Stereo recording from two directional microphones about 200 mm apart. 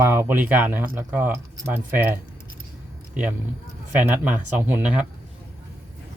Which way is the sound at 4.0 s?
10° right (ahead or behind).